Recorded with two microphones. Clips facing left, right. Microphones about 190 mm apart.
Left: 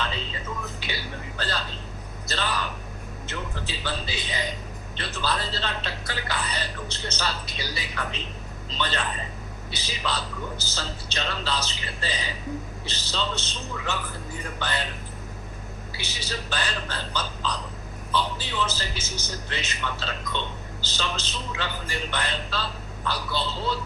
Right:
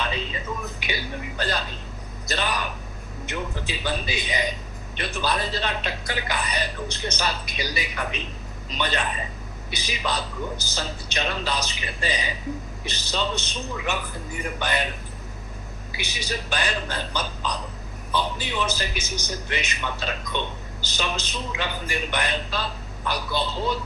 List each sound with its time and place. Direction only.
0.0 s a sound: 15° right (ahead or behind)
0.8 s speech: 15° right (ahead or behind)
16.0 s speech: 15° right (ahead or behind)